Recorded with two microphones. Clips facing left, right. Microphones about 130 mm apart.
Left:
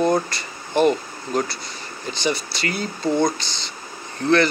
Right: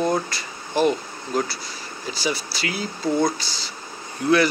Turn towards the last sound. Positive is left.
turn(degrees=-10)  # may be behind; listen again after turning